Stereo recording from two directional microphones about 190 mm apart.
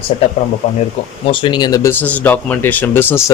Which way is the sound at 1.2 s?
25° left (ahead or behind).